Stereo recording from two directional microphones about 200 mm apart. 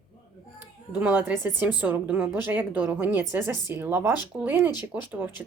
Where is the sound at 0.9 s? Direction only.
10° right (ahead or behind).